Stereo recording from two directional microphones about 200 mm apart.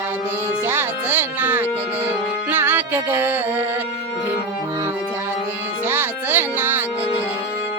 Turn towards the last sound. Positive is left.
turn(degrees=-10)  # may be behind; listen again after turning